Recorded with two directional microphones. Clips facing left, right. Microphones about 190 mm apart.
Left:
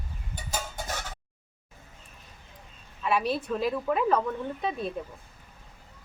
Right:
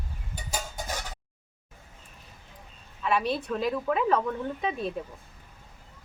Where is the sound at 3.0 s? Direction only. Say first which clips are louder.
Even; centre (ahead or behind).